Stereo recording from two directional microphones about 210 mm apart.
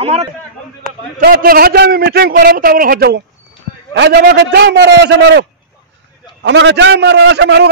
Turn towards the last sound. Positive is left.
turn(degrees=-55)  # may be behind; listen again after turning